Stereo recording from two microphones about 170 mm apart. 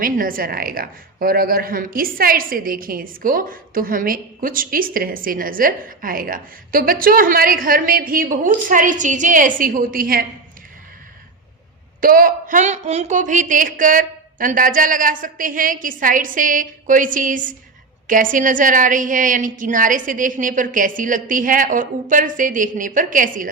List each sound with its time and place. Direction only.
0.0 s a woman's voice: 55° right (ahead or behind)
11.9 s speech: 55° right (ahead or behind)